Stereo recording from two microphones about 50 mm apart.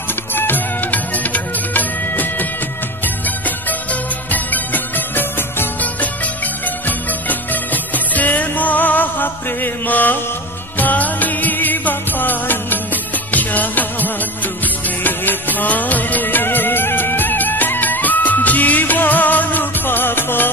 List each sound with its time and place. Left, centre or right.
0.3 s music: left
4.3 s music: left